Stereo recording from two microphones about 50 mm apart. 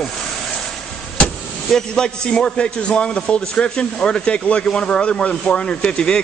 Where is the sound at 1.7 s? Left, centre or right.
Centre.